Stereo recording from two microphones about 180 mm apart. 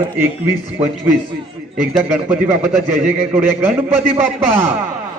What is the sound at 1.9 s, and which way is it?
Speech, 5° right (ahead or behind).